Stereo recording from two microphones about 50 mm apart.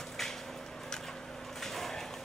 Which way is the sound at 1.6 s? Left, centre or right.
Centre.